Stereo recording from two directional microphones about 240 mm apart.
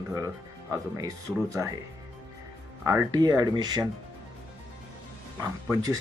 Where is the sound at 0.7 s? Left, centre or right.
Centre.